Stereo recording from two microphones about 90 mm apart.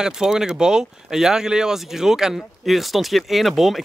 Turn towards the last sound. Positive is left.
turn(degrees=0)  # may be behind; listen again after turning